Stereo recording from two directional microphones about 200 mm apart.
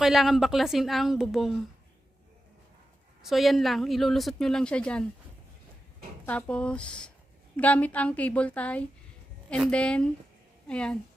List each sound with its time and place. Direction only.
0.0 s a woman's voice: centre (ahead or behind)
3.2 s a woman's voice: centre (ahead or behind)
6.2 s a woman's voice: 5° left (ahead or behind)